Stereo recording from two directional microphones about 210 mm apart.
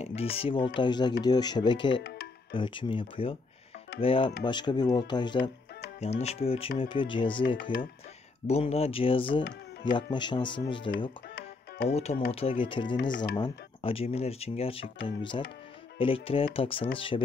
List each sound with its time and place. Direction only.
0.0 s speech: 30° left (ahead or behind)
5.9 s speech: 30° left (ahead or behind)
11.9 s speech: 30° left (ahead or behind)